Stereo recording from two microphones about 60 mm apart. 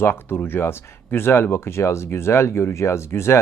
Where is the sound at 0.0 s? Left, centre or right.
Left.